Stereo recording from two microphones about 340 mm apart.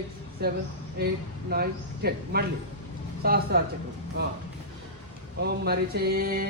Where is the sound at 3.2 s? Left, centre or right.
Right.